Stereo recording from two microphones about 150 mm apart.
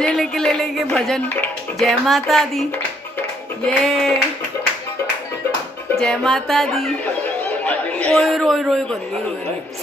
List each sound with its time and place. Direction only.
0.0 s speech: 5° left (ahead or behind)
3.6 s speech: 5° left (ahead or behind)
5.9 s speech: 5° left (ahead or behind)